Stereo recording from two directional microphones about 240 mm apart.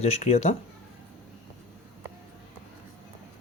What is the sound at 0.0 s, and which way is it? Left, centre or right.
Speech, left.